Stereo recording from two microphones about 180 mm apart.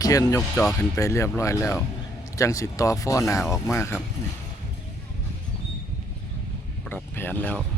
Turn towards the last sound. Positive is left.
turn(degrees=10)  # may be behind; listen again after turning